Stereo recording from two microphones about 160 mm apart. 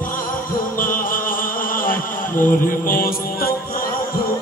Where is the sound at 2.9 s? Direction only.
65° left (ahead or behind).